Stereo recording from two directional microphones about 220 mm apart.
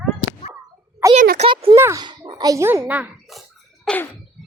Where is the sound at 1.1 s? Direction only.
35° right (ahead or behind).